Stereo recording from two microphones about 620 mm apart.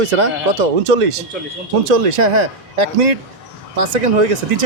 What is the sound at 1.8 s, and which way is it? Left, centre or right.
Speech, right.